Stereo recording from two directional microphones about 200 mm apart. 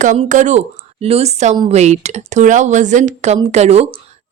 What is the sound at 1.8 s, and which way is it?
Speech, 35° right (ahead or behind).